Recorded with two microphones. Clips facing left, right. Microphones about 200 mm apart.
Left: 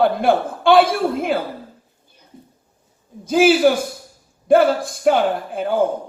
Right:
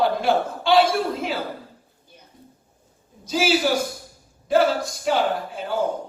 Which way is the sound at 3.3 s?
55° left (ahead or behind).